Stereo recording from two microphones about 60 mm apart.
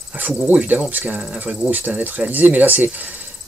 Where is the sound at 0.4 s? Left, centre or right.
Right.